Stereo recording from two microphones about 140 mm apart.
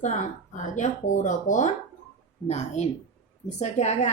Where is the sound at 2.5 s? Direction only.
50° left (ahead or behind).